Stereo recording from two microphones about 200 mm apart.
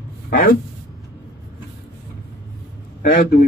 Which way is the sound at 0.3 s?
45° left (ahead or behind).